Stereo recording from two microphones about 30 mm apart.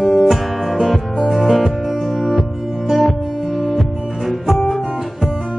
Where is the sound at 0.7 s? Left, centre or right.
Centre.